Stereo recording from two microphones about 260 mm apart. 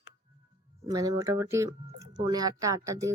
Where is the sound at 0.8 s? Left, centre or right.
Centre.